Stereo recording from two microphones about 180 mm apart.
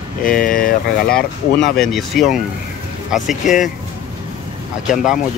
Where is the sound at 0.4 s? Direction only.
50° left (ahead or behind).